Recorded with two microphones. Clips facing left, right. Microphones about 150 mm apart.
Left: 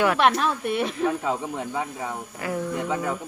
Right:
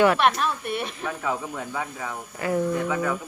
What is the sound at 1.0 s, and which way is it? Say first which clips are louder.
Speech: left 4 dB; 25° left (ahead or behind).